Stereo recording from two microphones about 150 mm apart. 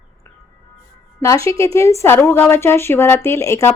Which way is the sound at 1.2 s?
20° left (ahead or behind).